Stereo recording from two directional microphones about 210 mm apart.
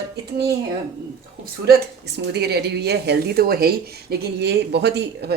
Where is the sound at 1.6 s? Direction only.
50° right (ahead or behind).